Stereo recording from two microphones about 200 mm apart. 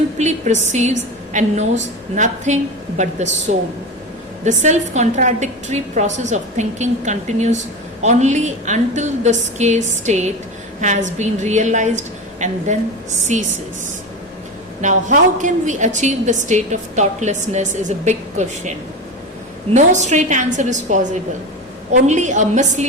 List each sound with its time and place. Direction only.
0.2 s a woman's voice: 35° right (ahead or behind)
4.4 s a woman's voice: 35° right (ahead or behind)
14.8 s a woman's voice: 35° right (ahead or behind)
19.7 s a woman's voice: 35° right (ahead or behind)